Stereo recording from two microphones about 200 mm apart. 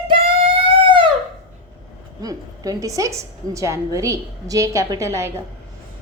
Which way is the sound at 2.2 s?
20° right (ahead or behind).